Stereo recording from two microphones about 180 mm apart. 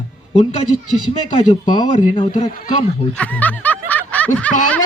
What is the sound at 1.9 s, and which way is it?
Speech, 30° left (ahead or behind).